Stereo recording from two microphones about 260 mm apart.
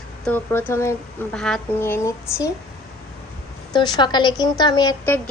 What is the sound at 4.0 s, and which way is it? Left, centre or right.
Speech, centre.